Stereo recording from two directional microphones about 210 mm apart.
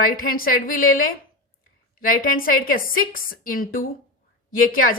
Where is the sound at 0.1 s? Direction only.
45° left (ahead or behind).